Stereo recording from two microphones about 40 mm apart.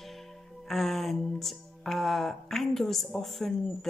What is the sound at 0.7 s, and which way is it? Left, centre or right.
Speech, centre.